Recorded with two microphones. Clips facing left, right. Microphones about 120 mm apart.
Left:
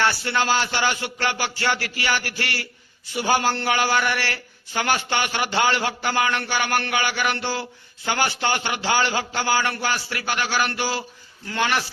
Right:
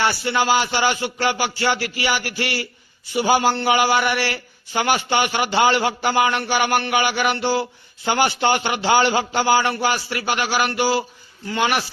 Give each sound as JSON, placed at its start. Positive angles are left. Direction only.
{"t": 0.0, "sound": "a man's voice", "side_deg": -10}